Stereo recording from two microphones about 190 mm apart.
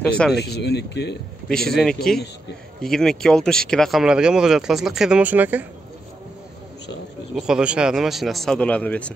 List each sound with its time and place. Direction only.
0.0 s speech: centre (ahead or behind)
0.4 s speech: 60° left (ahead or behind)
1.5 s speech: centre (ahead or behind)
7.3 s speech: 5° right (ahead or behind)